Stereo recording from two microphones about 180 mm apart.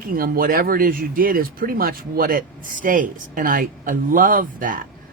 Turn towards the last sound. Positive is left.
turn(degrees=-50)  # may be behind; listen again after turning